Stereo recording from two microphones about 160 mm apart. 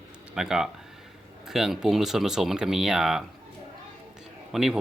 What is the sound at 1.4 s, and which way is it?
Speech, centre (ahead or behind).